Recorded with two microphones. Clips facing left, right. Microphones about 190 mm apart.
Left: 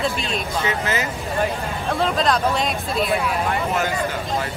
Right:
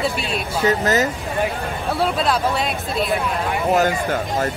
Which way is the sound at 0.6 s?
40° right (ahead or behind).